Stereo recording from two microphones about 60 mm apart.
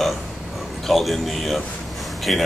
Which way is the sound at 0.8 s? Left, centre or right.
Centre.